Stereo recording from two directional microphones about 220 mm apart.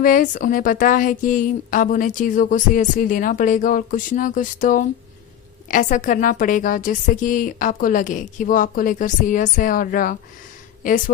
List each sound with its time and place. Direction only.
0.0 s speech: 40° left (ahead or behind)